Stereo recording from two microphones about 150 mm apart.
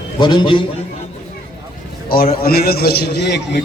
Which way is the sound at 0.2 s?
30° left (ahead or behind).